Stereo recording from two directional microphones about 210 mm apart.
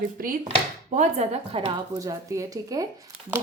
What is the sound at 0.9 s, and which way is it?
Speech, 30° right (ahead or behind).